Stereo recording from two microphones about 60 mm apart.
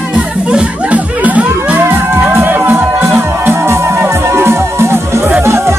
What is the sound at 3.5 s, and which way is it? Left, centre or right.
Music, right.